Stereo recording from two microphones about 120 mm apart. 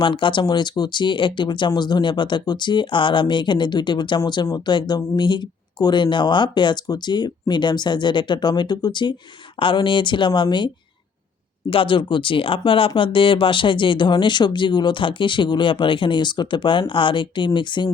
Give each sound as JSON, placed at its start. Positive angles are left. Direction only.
{"t": 0.0, "sound": "speech", "side_deg": 40}
{"t": 11.7, "sound": "speech", "side_deg": 45}